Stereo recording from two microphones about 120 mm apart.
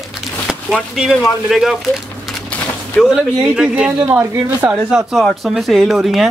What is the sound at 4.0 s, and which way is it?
Speech, 20° right (ahead or behind).